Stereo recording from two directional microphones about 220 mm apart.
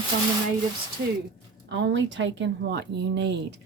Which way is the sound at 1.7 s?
55° right (ahead or behind).